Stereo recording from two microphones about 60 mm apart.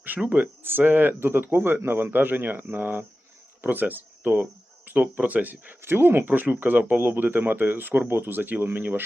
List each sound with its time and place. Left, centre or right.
0.3 s speech: right